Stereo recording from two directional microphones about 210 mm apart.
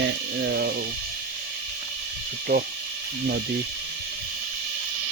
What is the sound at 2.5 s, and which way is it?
Speech, 50° right (ahead or behind).